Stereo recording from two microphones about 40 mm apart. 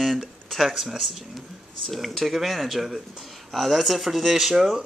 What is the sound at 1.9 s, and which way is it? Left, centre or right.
Speech, centre.